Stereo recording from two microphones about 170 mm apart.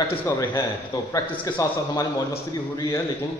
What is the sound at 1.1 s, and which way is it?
A man's voice, 20° left (ahead or behind).